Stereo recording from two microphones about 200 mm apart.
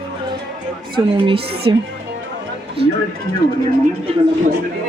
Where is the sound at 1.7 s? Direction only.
20° right (ahead or behind).